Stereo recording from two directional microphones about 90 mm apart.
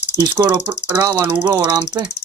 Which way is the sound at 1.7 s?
50° right (ahead or behind).